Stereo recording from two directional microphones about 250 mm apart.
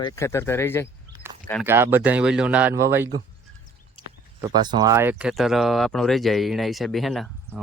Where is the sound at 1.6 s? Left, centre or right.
Centre.